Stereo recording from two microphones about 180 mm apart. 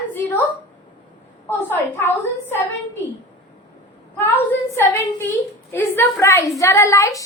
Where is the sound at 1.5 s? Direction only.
10° left (ahead or behind).